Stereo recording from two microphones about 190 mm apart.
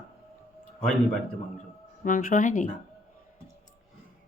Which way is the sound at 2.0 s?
45° left (ahead or behind).